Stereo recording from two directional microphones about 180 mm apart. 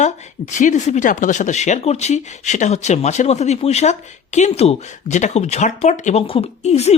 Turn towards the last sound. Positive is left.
turn(degrees=35)  # may be behind; listen again after turning